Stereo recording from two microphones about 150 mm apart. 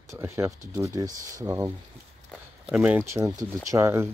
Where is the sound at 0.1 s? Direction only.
15° right (ahead or behind).